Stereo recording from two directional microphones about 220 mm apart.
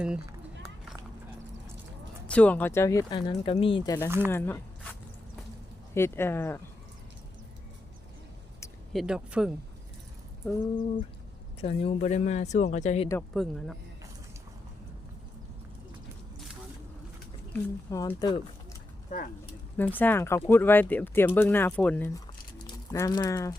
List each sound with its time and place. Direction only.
2.2 s speech: 5° left (ahead or behind)
3.2 s speech: 25° left (ahead or behind); by 4.9 s 10° left (ahead or behind)
5.9 s speech: 10° left (ahead or behind)
8.9 s speech: centre (ahead or behind)
11.6 s speech: 25° left (ahead or behind)
13.3 s speech: centre (ahead or behind)
17.5 s speech: 15° left (ahead or behind)
19.1 s speech: 35° left (ahead or behind)
19.7 s speech: 10° left (ahead or behind)